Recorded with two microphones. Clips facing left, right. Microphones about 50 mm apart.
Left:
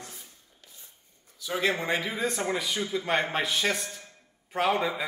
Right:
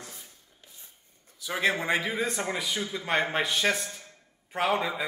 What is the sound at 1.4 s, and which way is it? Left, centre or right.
Speech, right.